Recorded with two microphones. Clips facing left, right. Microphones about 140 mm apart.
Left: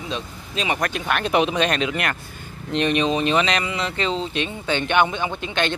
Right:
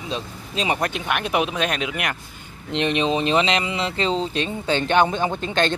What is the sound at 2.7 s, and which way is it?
Speech, 25° right (ahead or behind).